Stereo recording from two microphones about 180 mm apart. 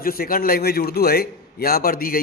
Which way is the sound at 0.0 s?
55° left (ahead or behind).